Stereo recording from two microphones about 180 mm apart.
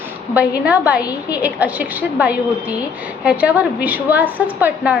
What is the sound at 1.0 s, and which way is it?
Speech, 20° left (ahead or behind).